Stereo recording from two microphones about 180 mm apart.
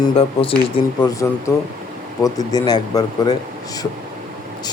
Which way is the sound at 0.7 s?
20° left (ahead or behind).